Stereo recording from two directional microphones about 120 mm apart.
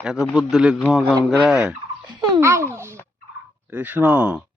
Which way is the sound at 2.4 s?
25° right (ahead or behind).